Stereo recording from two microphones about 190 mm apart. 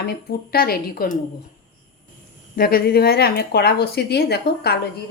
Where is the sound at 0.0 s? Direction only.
55° left (ahead or behind).